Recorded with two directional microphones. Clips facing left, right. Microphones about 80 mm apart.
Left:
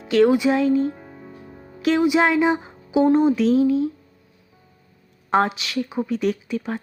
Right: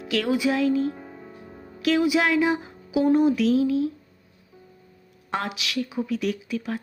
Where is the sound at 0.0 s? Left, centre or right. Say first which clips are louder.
Left 7 dB; left.